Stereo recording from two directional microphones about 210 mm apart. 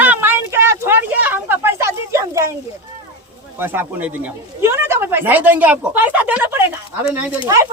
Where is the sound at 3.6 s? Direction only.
10° right (ahead or behind).